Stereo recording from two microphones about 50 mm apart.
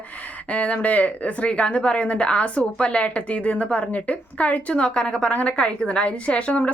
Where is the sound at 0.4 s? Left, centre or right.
Left.